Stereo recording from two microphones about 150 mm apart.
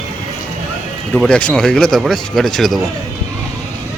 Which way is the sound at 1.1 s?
5° left (ahead or behind).